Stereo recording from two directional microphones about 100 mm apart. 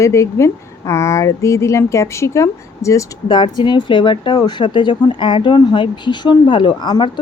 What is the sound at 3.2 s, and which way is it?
Speech, 50° left (ahead or behind).